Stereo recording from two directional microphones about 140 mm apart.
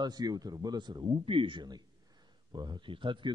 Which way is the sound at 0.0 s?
30° right (ahead or behind).